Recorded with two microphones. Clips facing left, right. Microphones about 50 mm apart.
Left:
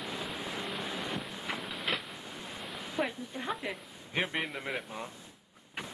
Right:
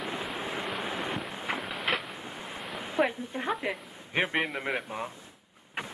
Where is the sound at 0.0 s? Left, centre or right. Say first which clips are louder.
Right 4 dB; centre.